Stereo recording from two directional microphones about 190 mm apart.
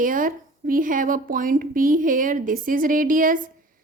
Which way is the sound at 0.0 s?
45° right (ahead or behind).